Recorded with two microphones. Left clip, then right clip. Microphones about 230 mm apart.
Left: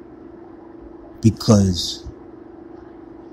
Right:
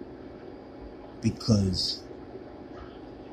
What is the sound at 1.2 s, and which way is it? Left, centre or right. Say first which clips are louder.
Speech: left 11 dB; centre.